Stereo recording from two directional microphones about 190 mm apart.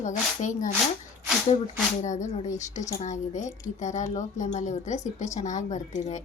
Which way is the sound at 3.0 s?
40° left (ahead or behind).